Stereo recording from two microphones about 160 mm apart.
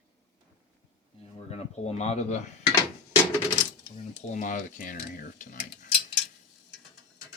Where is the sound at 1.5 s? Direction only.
40° left (ahead or behind).